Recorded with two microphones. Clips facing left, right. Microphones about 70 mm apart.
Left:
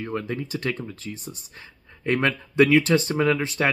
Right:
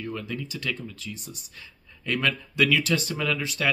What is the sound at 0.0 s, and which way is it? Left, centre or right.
Speech, left.